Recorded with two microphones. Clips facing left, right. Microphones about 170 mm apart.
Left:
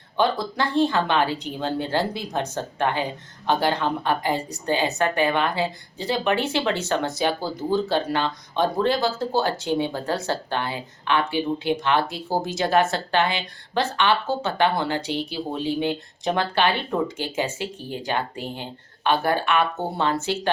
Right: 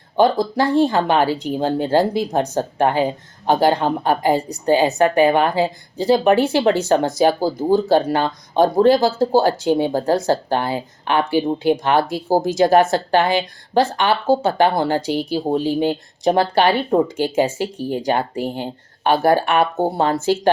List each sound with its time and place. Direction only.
0.2 s a woman's voice: 45° right (ahead or behind)